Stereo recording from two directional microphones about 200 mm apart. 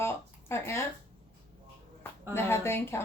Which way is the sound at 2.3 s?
10° left (ahead or behind).